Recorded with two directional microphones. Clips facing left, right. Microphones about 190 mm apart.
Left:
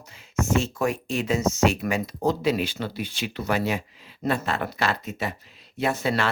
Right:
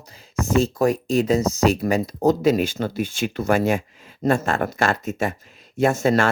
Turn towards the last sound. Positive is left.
turn(degrees=-45)  # may be behind; listen again after turning